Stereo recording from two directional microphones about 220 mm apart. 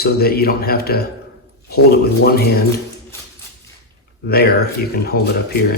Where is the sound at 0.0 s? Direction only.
45° left (ahead or behind).